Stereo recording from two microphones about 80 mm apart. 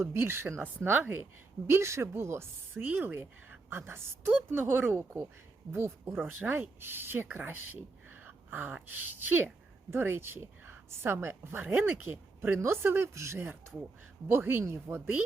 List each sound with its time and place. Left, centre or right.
0.0 s a woman's voice: right